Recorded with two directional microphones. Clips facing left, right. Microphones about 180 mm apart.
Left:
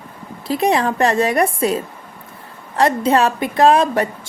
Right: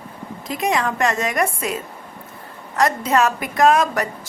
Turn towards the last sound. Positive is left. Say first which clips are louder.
# left 3 dB
turn(degrees=30)  # may be behind; listen again after turning